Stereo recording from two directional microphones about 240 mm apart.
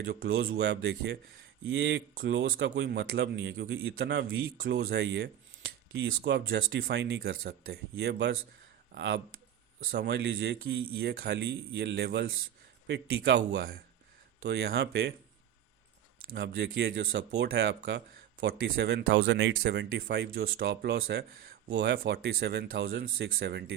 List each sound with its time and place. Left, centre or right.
0.1 s speech: right
16.3 s speech: right